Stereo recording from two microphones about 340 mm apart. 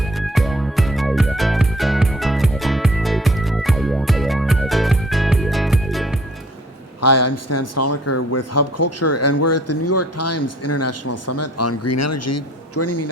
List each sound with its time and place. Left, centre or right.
0.2 s music: centre
7.0 s a man's voice: left